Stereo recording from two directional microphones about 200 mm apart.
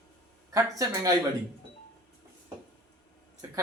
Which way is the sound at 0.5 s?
15° right (ahead or behind).